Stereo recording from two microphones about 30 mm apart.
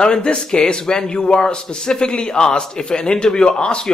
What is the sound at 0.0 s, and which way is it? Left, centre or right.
Speech, left.